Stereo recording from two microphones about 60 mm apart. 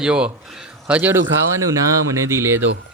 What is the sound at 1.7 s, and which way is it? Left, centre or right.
Speech, right.